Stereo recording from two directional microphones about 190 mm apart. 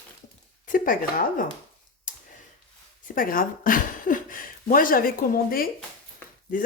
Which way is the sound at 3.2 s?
45° left (ahead or behind).